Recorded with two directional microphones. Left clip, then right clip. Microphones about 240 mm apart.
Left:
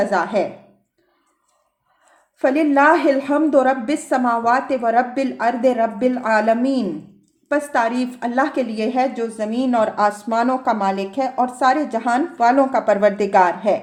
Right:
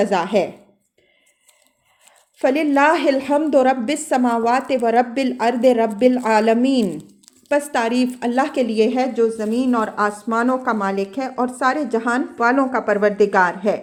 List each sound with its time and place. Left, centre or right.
0.0 s a woman's voice: right
2.4 s a woman's voice: right